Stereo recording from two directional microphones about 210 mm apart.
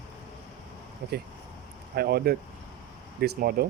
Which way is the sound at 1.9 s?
45° right (ahead or behind).